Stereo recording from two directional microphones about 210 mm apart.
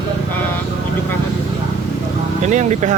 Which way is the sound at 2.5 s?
35° right (ahead or behind).